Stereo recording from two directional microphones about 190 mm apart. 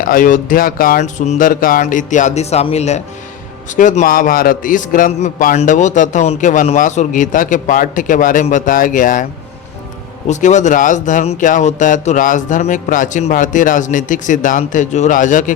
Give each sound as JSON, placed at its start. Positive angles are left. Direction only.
{"t": 0.0, "sound": "a man's voice", "side_deg": 45}
{"t": 10.2, "sound": "speech", "side_deg": 40}